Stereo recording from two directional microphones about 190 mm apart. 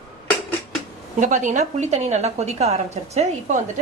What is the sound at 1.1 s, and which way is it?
A woman's voice, 40° right (ahead or behind).